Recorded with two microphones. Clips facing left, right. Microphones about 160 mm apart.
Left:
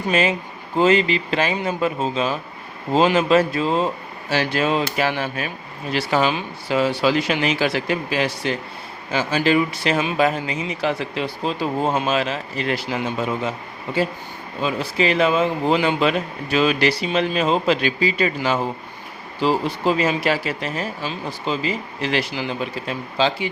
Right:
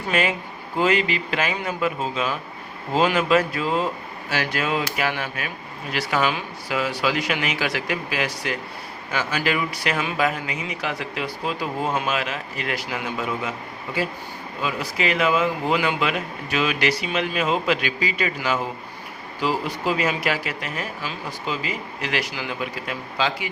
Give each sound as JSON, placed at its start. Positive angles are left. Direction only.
{"t": 0.1, "sound": "speech", "side_deg": 25}
{"t": 14.6, "sound": "speech", "side_deg": 30}